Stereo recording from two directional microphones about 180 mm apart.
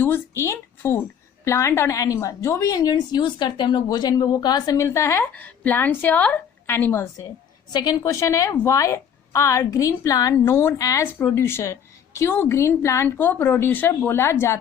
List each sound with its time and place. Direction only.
0.0 s a woman's voice: 15° left (ahead or behind)